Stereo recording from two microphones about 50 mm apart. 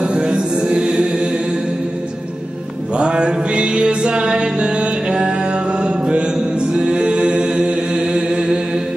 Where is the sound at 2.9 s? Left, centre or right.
Centre.